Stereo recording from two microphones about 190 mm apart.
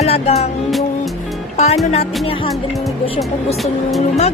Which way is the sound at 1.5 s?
35° left (ahead or behind).